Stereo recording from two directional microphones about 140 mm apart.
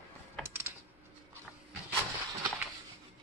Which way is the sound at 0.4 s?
15° right (ahead or behind).